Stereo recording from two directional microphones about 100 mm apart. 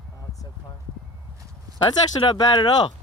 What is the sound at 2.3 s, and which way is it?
Speech, 45° left (ahead or behind).